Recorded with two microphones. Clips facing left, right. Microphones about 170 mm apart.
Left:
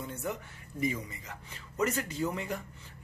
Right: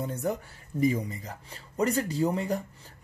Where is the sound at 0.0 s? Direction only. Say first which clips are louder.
Right 6 dB; 40° right (ahead or behind).